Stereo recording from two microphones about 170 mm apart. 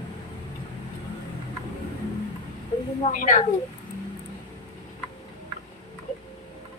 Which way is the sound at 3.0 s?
50° left (ahead or behind).